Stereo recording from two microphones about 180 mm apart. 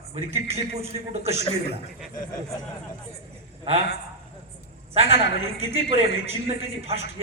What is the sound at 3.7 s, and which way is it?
Speech, 35° right (ahead or behind).